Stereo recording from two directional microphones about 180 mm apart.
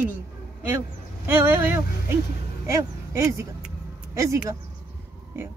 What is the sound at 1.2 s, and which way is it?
Speech, 15° right (ahead or behind).